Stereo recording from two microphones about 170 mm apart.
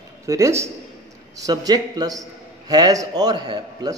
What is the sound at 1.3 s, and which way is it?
A man's voice, 20° right (ahead or behind).